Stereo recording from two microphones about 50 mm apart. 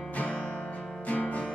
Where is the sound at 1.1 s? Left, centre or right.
Left.